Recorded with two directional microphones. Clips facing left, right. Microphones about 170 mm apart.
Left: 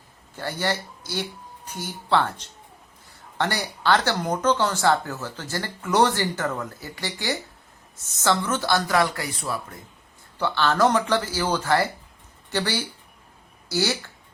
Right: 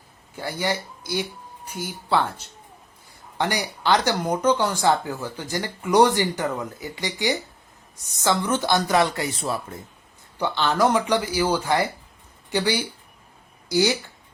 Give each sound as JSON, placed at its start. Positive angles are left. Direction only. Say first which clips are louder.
{"t": 0.3, "sound": "speech", "louder": "right 1 dB", "side_deg": -10}
{"t": 3.3, "sound": "speech", "louder": "right 1 dB", "side_deg": -15}